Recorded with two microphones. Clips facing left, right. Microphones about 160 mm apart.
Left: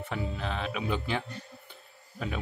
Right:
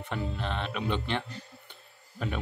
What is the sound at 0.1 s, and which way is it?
Speech, 5° left (ahead or behind).